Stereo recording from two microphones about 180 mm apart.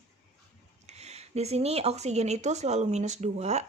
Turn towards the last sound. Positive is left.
turn(degrees=-40)  # may be behind; listen again after turning